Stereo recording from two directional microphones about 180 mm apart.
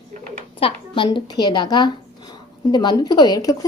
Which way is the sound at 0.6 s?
30° left (ahead or behind).